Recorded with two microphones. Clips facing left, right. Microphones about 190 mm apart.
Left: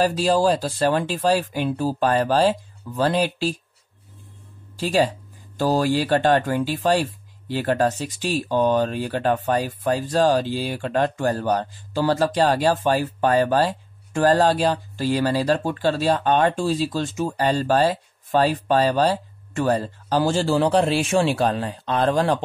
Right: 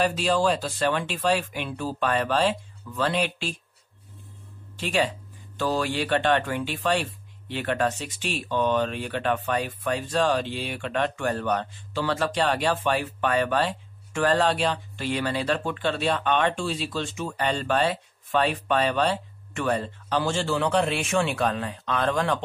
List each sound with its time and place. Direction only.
0.0 s speech: 35° left (ahead or behind)
4.7 s speech: 35° left (ahead or behind)